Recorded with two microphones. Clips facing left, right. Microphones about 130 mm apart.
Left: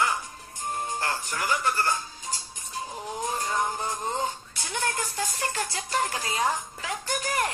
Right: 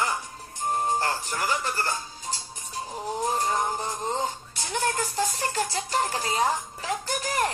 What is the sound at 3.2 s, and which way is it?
Music, 40° right (ahead or behind).